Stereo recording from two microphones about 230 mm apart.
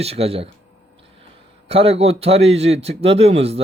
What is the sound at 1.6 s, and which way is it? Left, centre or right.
Speech, right.